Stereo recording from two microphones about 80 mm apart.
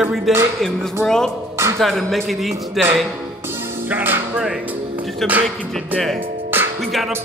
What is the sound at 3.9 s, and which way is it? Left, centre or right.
Speech, right.